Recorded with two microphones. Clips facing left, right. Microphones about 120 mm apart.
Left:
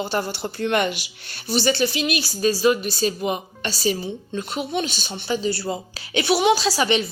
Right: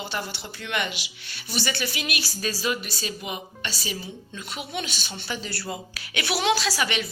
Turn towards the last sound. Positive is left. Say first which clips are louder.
# left 6 dB
turn(degrees=25)  # may be behind; listen again after turning